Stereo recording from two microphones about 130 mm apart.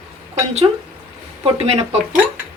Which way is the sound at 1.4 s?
50° right (ahead or behind).